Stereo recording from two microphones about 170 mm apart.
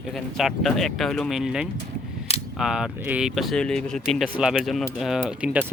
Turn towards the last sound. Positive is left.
turn(degrees=-10)  # may be behind; listen again after turning